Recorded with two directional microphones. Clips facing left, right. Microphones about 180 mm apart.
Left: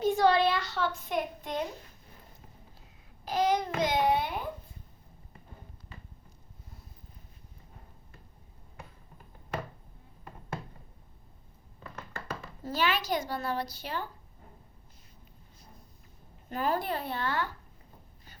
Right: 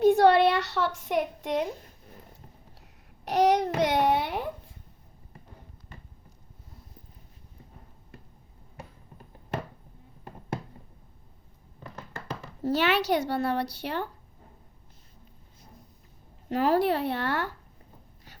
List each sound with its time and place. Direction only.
0.0 s a sound: 60° right (ahead or behind); by 1.6 s 80° right
3.2 s a child's voice: 70° right (ahead or behind)
12.6 s a woman's voice: 70° right (ahead or behind)
16.5 s speech: 80° right